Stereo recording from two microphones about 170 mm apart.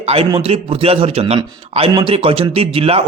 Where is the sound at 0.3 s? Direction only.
30° right (ahead or behind).